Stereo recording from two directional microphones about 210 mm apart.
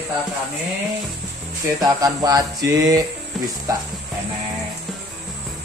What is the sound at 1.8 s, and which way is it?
Mantra, 15° right (ahead or behind).